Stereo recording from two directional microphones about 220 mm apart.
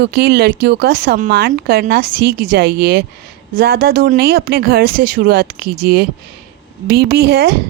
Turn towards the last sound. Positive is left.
turn(degrees=-45)  # may be behind; listen again after turning